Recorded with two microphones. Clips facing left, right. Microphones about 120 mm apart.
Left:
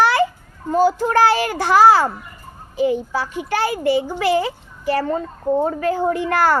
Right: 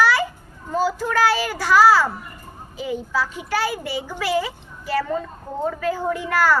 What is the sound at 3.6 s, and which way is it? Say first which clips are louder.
A child's voice: left 7 dB; 50° left (ahead or behind).